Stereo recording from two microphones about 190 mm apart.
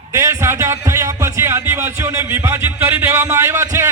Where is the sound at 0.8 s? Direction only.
15° right (ahead or behind).